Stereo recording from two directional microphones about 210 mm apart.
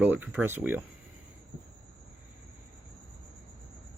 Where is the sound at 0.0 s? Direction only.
10° right (ahead or behind).